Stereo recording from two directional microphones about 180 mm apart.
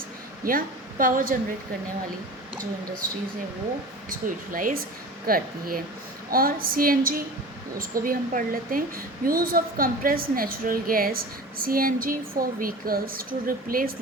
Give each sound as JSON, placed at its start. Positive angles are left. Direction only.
{"t": 0.4, "sound": "a woman's voice", "side_deg": -50}
{"t": 4.5, "sound": "a woman's voice", "side_deg": -50}